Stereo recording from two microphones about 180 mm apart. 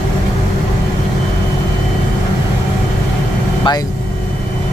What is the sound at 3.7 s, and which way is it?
Speech, 25° left (ahead or behind).